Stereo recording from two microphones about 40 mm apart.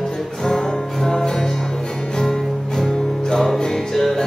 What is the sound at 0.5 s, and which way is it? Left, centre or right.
Music, centre.